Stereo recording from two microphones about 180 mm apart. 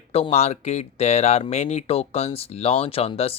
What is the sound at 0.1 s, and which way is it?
Speech, 35° left (ahead or behind).